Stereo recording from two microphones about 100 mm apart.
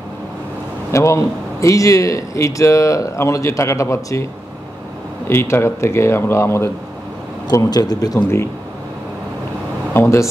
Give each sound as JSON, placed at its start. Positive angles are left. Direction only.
{"t": 0.9, "sound": "a man's voice", "side_deg": 30}
{"t": 5.3, "sound": "speech", "side_deg": 25}
{"t": 7.4, "sound": "a man's voice", "side_deg": 40}
{"t": 9.9, "sound": "speech", "side_deg": 30}